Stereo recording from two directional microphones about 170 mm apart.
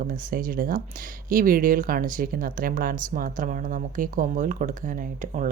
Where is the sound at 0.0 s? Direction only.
55° right (ahead or behind).